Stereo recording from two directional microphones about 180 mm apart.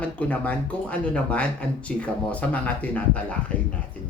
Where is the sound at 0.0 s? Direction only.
10° left (ahead or behind).